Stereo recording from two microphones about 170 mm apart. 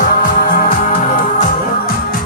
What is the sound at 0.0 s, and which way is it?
Music, 50° left (ahead or behind).